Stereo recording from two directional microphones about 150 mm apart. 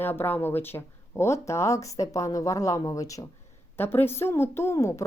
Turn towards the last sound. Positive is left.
turn(degrees=20)  # may be behind; listen again after turning